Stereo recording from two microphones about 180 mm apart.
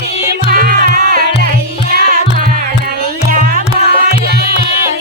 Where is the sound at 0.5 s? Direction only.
55° right (ahead or behind).